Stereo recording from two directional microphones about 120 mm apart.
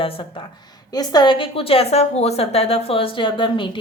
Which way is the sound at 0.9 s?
35° left (ahead or behind).